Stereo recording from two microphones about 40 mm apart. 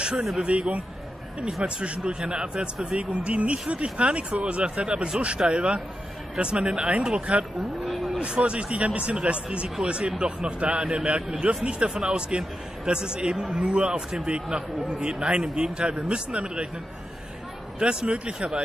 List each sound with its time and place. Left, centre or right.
0.4 s a man's voice: right
7.8 s speech: centre
8.2 s a man's voice: right
16.1 s a man's voice: right
17.7 s a man's voice: right